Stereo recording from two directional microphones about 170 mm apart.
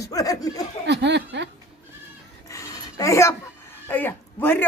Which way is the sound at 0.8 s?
90° right.